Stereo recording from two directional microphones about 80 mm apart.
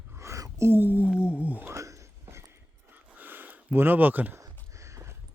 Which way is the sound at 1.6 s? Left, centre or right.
Right.